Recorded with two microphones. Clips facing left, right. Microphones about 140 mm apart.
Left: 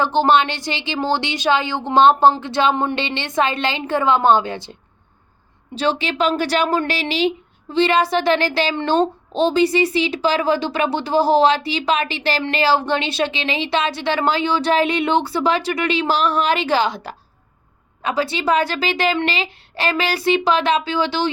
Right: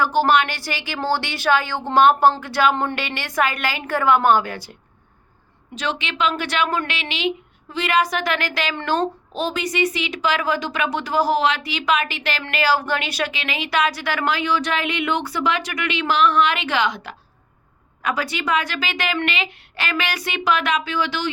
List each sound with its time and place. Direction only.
0.0 s speech: 25° left (ahead or behind)
5.7 s speech: 35° left (ahead or behind)